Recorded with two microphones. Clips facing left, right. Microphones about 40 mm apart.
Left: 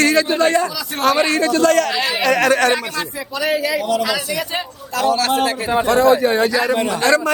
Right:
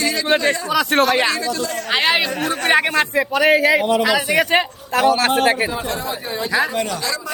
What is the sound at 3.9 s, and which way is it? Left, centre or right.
Speech, right.